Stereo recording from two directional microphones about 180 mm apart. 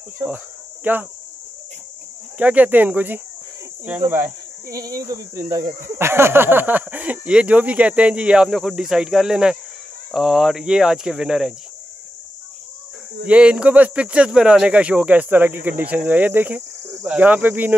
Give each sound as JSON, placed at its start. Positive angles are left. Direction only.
{"t": 0.8, "sound": "speech", "side_deg": -10}
{"t": 2.3, "sound": "speech", "side_deg": -10}
{"t": 13.3, "sound": "speech", "side_deg": -5}